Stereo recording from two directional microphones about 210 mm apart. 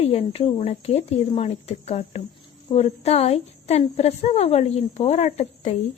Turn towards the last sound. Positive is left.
turn(degrees=30)  # may be behind; listen again after turning